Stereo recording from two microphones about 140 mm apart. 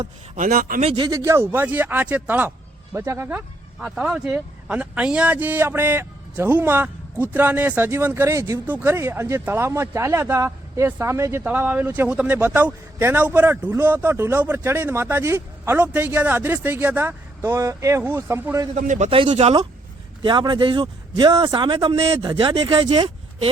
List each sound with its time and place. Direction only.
0.0 s a man's voice: 65° right (ahead or behind); by 0.8 s 85° right
0.8 s speech: 40° right (ahead or behind)
1.1 s speech: 20° right (ahead or behind)
3.8 s speech: 5° right (ahead or behind)
18.8 s a man's voice: 60° right (ahead or behind)
19.2 s speech: 40° right (ahead or behind)